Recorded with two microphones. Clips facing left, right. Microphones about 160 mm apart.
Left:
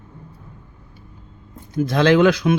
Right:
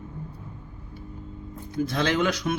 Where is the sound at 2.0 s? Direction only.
90° left.